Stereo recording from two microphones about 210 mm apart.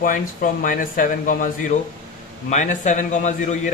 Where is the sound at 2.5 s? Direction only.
35° left (ahead or behind).